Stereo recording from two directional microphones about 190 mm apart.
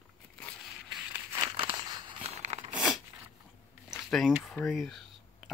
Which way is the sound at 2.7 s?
5° right (ahead or behind).